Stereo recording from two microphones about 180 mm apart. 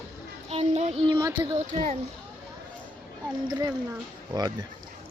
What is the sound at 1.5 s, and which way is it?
Speech, 40° right (ahead or behind).